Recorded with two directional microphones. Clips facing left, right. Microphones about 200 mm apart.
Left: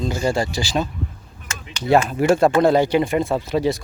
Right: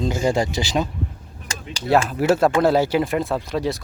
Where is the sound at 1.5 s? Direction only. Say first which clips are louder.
Right 1 dB; 35° right (ahead or behind).